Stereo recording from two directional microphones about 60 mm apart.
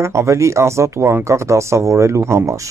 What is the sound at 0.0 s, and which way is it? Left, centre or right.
Speech, right.